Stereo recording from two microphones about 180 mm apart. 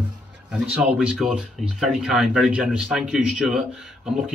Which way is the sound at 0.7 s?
5° right (ahead or behind).